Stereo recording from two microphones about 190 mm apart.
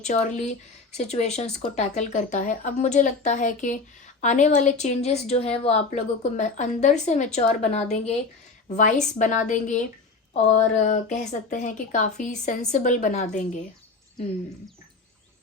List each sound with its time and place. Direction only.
0.0 s a woman's voice: 40° left (ahead or behind)